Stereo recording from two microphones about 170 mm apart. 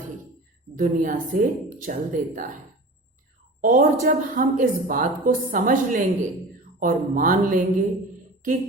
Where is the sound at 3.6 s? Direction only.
50° right (ahead or behind).